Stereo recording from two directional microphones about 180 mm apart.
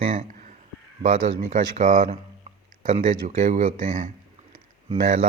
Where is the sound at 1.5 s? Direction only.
50° right (ahead or behind).